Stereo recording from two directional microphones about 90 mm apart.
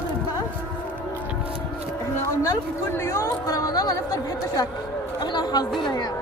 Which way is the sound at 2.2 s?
40° left (ahead or behind).